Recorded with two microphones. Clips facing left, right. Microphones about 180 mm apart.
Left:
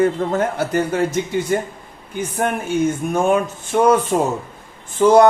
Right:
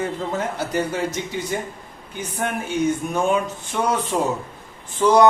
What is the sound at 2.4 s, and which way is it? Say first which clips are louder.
Speech: left 4 dB; 50° left (ahead or behind).